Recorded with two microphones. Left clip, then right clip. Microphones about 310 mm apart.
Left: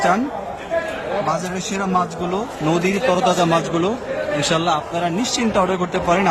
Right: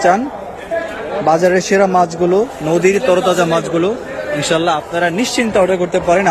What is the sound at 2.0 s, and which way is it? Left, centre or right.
A man's voice, centre.